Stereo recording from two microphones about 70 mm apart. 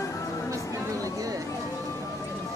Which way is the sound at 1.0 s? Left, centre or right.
Right.